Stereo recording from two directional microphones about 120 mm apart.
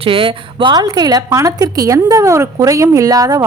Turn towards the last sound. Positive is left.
turn(degrees=-30)  # may be behind; listen again after turning